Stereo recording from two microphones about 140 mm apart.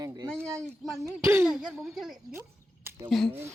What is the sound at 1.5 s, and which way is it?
Speech, 5° right (ahead or behind).